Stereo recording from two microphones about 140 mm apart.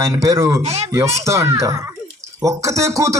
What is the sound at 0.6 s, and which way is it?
Speech, 50° right (ahead or behind).